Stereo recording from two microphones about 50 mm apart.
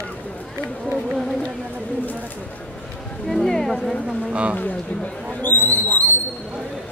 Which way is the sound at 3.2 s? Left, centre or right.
Centre.